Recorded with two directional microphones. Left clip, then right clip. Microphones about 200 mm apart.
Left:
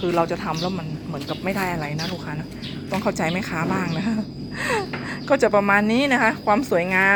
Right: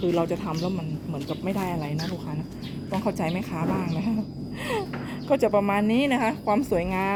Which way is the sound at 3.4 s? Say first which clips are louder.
Left 5 dB; 40° left (ahead or behind).